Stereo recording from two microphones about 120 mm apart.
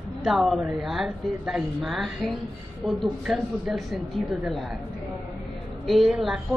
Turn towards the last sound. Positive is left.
turn(degrees=-5)  # may be behind; listen again after turning